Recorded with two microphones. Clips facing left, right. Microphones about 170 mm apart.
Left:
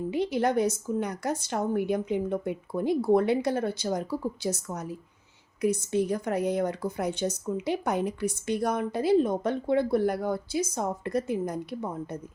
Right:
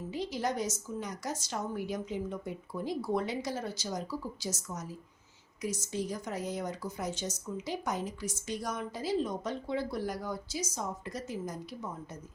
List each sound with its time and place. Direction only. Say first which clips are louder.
0.1 s speech: left 8 dB; 60° left (ahead or behind)